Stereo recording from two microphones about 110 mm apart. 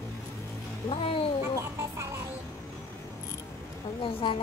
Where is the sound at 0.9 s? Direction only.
55° left (ahead or behind).